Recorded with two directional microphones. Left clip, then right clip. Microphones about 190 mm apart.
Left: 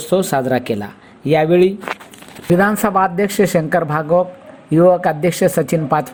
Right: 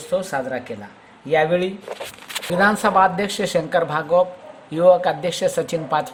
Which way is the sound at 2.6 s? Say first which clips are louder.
Even; 25° left (ahead or behind).